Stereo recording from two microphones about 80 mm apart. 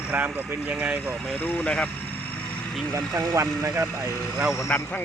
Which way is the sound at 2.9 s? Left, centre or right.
Right.